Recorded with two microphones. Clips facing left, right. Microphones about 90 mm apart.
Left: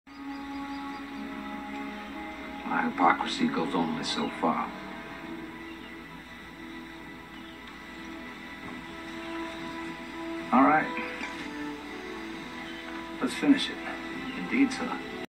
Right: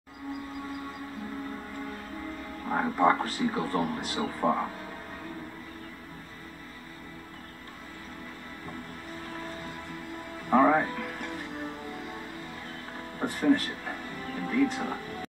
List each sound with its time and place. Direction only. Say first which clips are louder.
2.7 s speech: even; 30° right (ahead or behind)
10.5 s music: even; 35° right (ahead or behind)
13.2 s music: left 1 dB; 40° right (ahead or behind)